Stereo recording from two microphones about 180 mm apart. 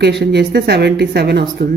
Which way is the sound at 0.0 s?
70° right (ahead or behind).